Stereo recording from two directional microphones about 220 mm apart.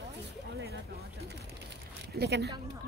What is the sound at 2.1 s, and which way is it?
Speech, 50° right (ahead or behind).